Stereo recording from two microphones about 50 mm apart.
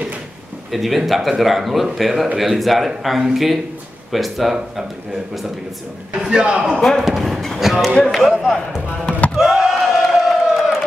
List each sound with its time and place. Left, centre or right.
0.7 s speech: centre
6.1 s a man's voice: centre
6.8 s speech: centre
9.4 s crowd: centre